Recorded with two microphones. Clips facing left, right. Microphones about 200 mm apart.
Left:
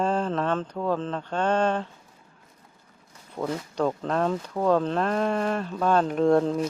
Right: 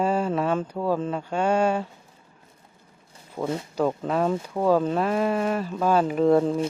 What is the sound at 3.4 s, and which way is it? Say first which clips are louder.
Speech: right 2 dB; 25° right (ahead or behind).